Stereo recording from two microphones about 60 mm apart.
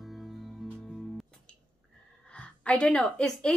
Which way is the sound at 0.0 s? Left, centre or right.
Centre.